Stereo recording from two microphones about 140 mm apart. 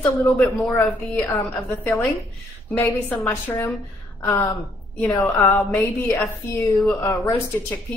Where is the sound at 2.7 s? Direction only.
15° left (ahead or behind).